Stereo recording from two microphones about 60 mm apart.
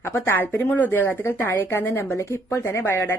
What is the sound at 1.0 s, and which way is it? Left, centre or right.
Speech, left.